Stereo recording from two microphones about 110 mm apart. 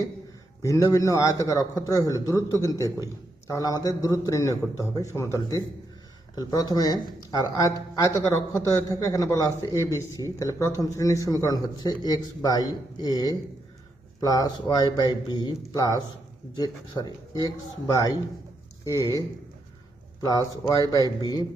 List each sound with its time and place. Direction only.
0.6 s a man's voice: 30° left (ahead or behind)
20.2 s speech: 35° left (ahead or behind)